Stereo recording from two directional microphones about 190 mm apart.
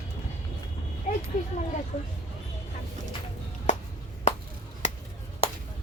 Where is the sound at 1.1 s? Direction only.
40° left (ahead or behind).